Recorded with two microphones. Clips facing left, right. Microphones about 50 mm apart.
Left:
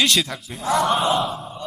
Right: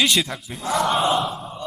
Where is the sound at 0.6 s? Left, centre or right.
Left.